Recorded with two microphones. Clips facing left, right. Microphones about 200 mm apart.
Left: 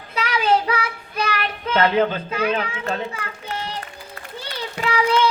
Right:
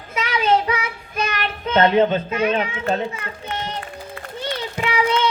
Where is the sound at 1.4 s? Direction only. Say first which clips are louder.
Right 4 dB; 30° right (ahead or behind).